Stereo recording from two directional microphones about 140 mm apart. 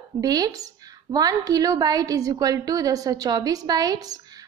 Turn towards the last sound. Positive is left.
turn(degrees=-30)  # may be behind; listen again after turning